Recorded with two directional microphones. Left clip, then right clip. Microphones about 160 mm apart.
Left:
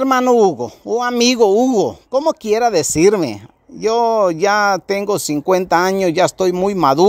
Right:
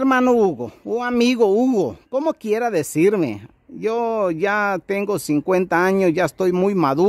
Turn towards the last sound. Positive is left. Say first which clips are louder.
# left 5 dB
turn(degrees=-5)  # may be behind; listen again after turning